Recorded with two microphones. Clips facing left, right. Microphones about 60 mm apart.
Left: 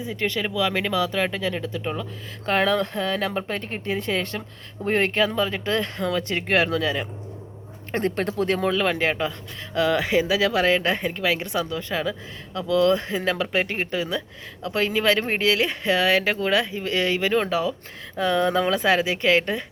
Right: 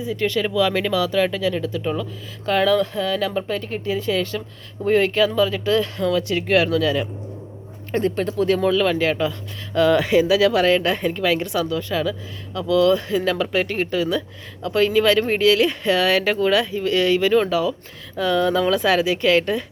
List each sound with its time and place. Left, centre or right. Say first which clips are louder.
0.0 s speech: right 4 dB; left
2.5 s speech: right 3 dB; left
7.9 s speech: right 3 dB; left
9.7 s speech: right 5 dB; centre
11.4 s speech: right 4 dB; left